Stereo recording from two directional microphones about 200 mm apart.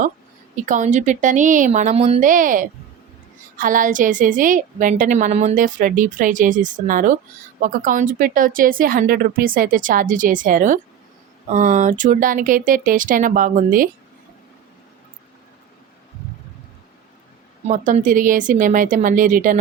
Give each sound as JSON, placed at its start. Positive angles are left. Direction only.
{"t": 0.5, "sound": "a woman's voice", "side_deg": -40}
{"t": 17.7, "sound": "a woman's voice", "side_deg": -40}